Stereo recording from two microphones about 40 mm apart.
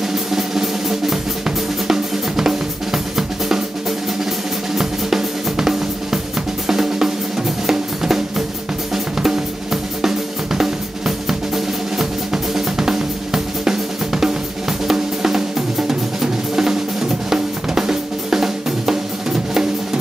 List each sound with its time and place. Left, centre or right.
0.1 s music: centre
1.9 s drum kit: centre
4.7 s drum: centre